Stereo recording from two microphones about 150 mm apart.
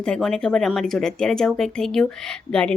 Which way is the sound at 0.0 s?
5° left (ahead or behind).